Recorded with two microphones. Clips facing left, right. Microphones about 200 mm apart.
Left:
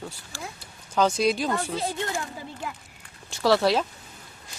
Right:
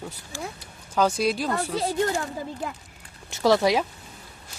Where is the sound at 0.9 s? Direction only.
5° right (ahead or behind).